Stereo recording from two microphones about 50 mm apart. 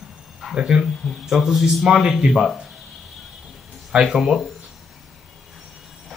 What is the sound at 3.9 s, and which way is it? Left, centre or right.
Speech, centre.